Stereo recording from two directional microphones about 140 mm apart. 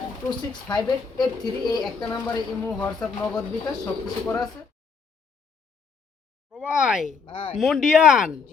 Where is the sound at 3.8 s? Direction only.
25° left (ahead or behind).